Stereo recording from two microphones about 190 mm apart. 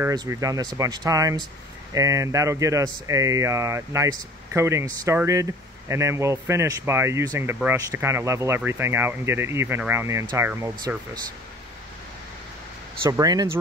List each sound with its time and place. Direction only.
0.0 s speech: 20° right (ahead or behind)
13.1 s speech: 20° right (ahead or behind)